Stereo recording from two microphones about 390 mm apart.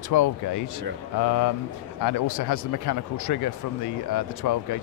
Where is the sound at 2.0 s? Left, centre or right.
Left.